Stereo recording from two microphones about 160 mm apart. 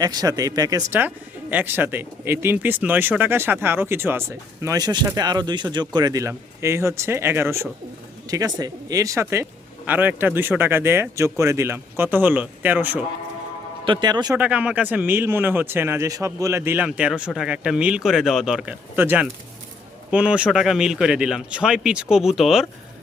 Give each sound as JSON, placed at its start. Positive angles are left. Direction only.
{"t": 0.0, "sound": "speech", "side_deg": -25}
{"t": 0.9, "sound": "speech", "side_deg": -10}
{"t": 13.8, "sound": "speech", "side_deg": -30}
{"t": 14.3, "sound": "a man's voice", "side_deg": -10}